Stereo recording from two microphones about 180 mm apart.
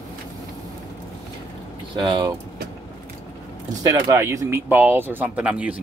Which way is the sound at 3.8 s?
20° right (ahead or behind).